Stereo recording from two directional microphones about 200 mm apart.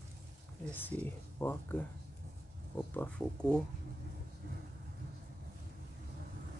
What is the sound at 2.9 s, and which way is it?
Speech, 5° left (ahead or behind).